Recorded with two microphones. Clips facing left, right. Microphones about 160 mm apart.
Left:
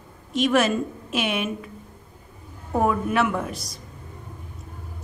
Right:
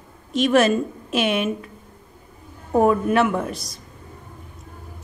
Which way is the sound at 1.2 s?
15° left (ahead or behind).